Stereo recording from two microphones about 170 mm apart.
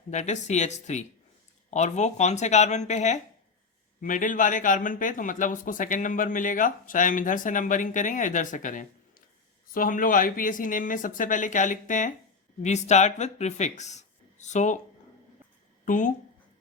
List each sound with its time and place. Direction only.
0.1 s speech: 45° left (ahead or behind)
15.9 s speech: 50° left (ahead or behind)